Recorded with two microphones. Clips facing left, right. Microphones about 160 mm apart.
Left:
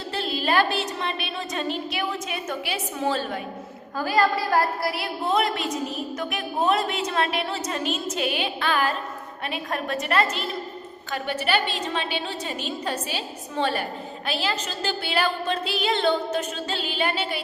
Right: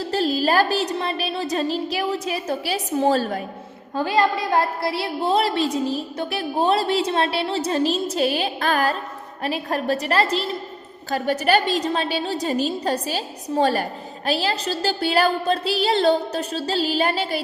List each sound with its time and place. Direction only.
0.1 s a woman's voice: 40° right (ahead or behind)
3.9 s a woman's voice: 25° right (ahead or behind)